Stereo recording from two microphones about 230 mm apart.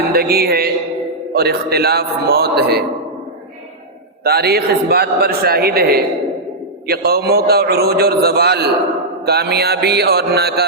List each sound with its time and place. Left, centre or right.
0.1 s a man's voice: right
4.2 s a man's voice: right